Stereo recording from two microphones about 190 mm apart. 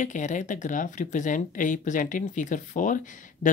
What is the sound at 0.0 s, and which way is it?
Speech, 40° left (ahead or behind).